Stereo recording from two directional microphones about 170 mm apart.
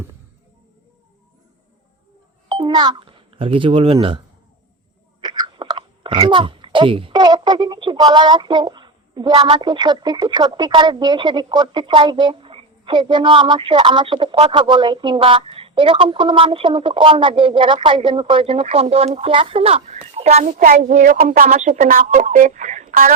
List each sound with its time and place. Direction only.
2.5 s doorbell: 25° right (ahead or behind)
3.9 s speech: 30° right (ahead or behind)
5.2 s speech: 25° right (ahead or behind); by 23.1 s 50° right (ahead or behind)